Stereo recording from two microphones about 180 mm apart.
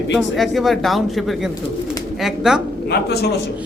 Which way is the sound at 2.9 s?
65° left (ahead or behind).